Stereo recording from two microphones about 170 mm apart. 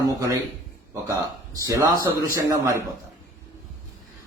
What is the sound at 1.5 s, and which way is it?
A man's voice, 20° right (ahead or behind).